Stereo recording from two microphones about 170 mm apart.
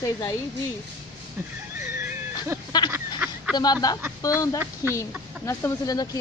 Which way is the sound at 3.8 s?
20° left (ahead or behind).